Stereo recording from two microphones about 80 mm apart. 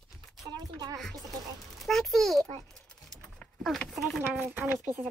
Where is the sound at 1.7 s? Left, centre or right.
Centre.